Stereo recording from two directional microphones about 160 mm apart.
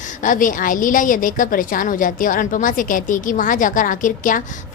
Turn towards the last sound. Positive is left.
turn(degrees=55)  # may be behind; listen again after turning